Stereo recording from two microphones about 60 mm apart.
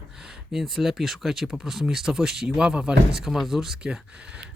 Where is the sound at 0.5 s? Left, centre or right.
Centre.